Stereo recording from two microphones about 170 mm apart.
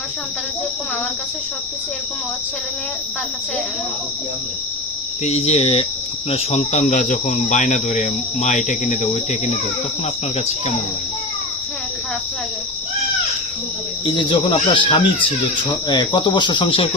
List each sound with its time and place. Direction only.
5.2 s cricket: 40° left (ahead or behind)
6.3 s speech: 40° left (ahead or behind)
14.0 s speech: 25° left (ahead or behind)